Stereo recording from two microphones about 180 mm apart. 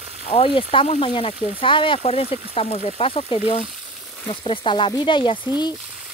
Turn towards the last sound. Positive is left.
turn(degrees=25)  # may be behind; listen again after turning